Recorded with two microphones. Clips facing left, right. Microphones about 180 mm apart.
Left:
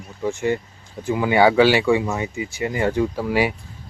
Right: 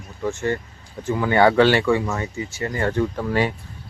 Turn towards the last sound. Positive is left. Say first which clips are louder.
# left 1 dB
turn(degrees=10)  # may be behind; listen again after turning